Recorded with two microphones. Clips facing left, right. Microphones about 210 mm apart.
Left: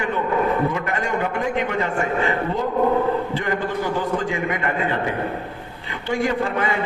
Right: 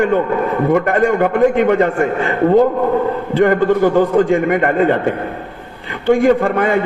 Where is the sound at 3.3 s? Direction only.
55° right (ahead or behind).